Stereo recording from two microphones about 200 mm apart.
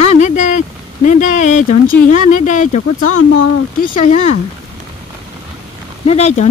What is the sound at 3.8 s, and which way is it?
Speech, 35° left (ahead or behind).